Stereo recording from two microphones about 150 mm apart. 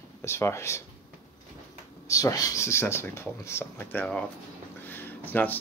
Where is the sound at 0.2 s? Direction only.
15° left (ahead or behind).